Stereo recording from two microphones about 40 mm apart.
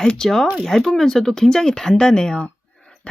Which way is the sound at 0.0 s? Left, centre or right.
Centre.